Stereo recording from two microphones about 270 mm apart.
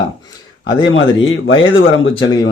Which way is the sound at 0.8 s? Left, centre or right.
Left.